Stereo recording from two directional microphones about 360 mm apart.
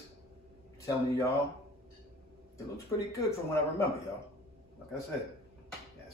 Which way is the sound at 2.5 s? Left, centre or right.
Centre.